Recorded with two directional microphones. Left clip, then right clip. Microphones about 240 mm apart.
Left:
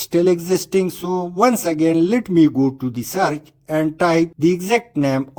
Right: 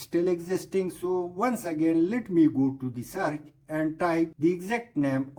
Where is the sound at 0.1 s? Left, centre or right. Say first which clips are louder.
Left 10 dB; left.